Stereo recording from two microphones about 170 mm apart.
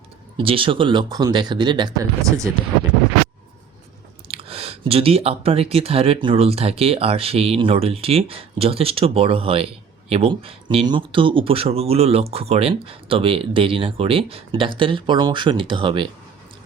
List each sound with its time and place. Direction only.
0.3 s speech: 30° right (ahead or behind)
4.3 s speech: 35° right (ahead or behind)